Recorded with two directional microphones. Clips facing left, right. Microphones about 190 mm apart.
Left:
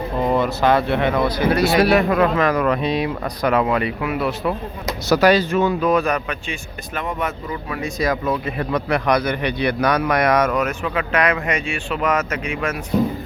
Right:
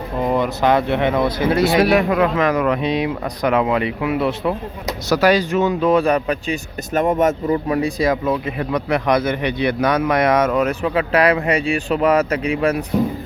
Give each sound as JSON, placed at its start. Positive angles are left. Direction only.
{"t": 0.2, "sound": "speech", "side_deg": -15}
{"t": 5.0, "sound": "speech", "side_deg": 0}
{"t": 5.3, "sound": "speech", "side_deg": -15}
{"t": 8.3, "sound": "a man's voice", "side_deg": -20}